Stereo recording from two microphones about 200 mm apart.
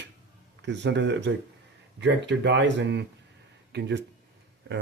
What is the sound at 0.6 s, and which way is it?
Speech, 60° right (ahead or behind).